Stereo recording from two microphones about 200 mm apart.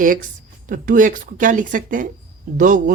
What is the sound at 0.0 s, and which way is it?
Speech, 40° right (ahead or behind).